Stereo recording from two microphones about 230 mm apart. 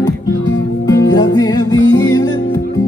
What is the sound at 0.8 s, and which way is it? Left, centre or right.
Music, centre.